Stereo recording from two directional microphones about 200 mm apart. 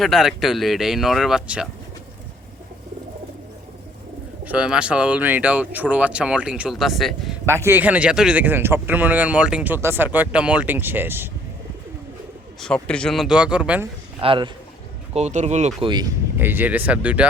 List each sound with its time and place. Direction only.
0.0 s speech: centre (ahead or behind)
4.4 s speech: 5° right (ahead or behind)
7.4 s speech: 10° right (ahead or behind)
12.5 s speech: 5° left (ahead or behind)
14.2 s a man's voice: 25° right (ahead or behind)
15.8 s speech: 20° right (ahead or behind); by 17.2 s 5° right (ahead or behind)